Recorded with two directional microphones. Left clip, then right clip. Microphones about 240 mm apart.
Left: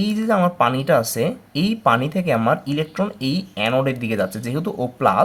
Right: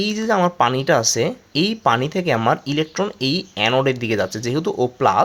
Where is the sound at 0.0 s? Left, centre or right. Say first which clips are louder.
Right 1 dB; right.